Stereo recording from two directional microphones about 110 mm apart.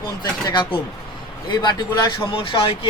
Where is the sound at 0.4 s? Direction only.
45° left (ahead or behind).